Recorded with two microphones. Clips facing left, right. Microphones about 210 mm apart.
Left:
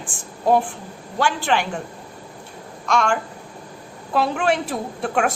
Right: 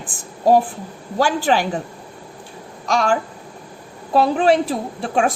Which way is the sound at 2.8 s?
35° right (ahead or behind).